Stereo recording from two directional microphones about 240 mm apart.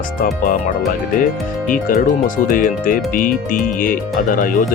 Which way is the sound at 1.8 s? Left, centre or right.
Left.